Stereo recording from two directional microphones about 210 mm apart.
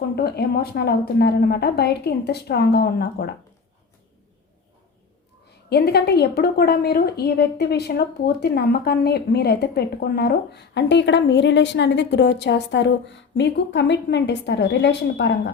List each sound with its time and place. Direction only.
0.2 s a woman's voice: 50° left (ahead or behind)
5.6 s a woman's voice: 50° left (ahead or behind)